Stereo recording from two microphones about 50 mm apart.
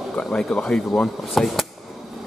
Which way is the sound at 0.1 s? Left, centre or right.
Left.